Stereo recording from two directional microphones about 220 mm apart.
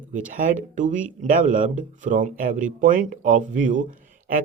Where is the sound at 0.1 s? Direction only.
35° right (ahead or behind).